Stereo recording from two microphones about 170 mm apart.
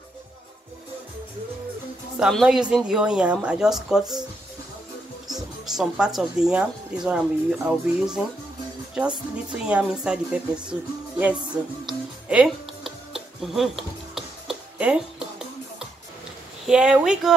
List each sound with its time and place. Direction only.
2.1 s a woman's voice: 5° right (ahead or behind)
5.3 s a woman's voice: centre (ahead or behind)
9.5 s speech: 5° right (ahead or behind)
12.3 s music: 5° right (ahead or behind)
16.6 s a woman's voice: 5° right (ahead or behind)